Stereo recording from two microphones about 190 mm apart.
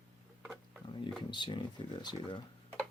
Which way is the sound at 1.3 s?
25° left (ahead or behind).